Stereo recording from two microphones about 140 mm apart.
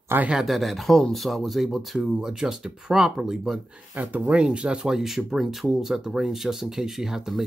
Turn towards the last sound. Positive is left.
turn(degrees=-5)  # may be behind; listen again after turning